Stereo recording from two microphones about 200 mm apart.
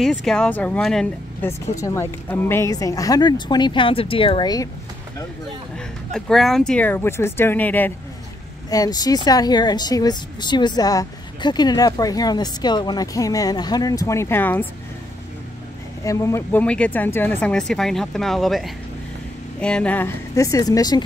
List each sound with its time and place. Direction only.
0.0 s speech: centre (ahead or behind); by 4.6 s 20° left (ahead or behind)
6.1 s speech: centre (ahead or behind)
16.0 s speech: 15° left (ahead or behind)